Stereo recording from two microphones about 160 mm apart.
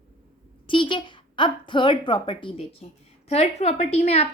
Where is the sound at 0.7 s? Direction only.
30° left (ahead or behind).